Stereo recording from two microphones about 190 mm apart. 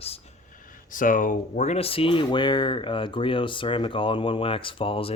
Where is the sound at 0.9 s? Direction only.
45° left (ahead or behind).